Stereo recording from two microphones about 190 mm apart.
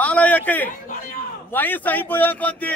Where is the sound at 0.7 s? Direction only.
45° left (ahead or behind).